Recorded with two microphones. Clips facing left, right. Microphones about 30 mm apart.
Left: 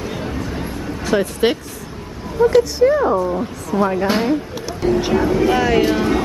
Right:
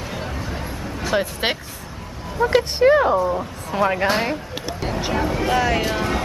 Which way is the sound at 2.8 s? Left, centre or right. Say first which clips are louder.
Right 4 dB; right.